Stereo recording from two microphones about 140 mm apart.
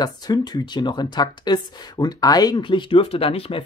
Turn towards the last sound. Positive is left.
turn(degrees=45)  # may be behind; listen again after turning